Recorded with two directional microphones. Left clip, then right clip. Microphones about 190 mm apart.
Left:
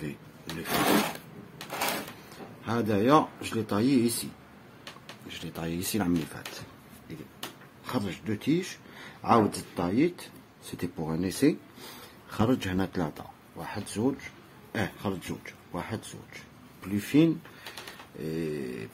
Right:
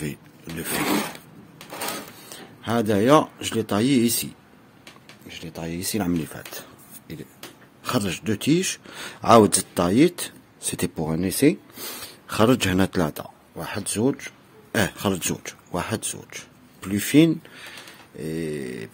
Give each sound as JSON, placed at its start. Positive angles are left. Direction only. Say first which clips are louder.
{"t": 0.0, "sound": "roaring cats", "louder": "right 5 dB", "side_deg": -55}
{"t": 2.2, "sound": "speech", "louder": "right 6 dB", "side_deg": -50}
{"t": 5.3, "sound": "speech", "louder": "right 3 dB", "side_deg": -15}
{"t": 6.2, "sound": "speech", "louder": "right 4 dB", "side_deg": -50}
{"t": 7.8, "sound": "speech", "louder": "right 8 dB", "side_deg": -60}
{"t": 11.1, "sound": "mantra", "louder": "right 6 dB", "side_deg": -40}
{"t": 12.3, "sound": "speech", "louder": "right 9 dB", "side_deg": -50}
{"t": 18.1, "sound": "mantra", "louder": "right 4 dB", "side_deg": -30}